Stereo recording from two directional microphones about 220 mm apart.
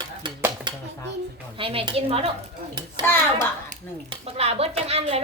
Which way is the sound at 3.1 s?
10° left (ahead or behind).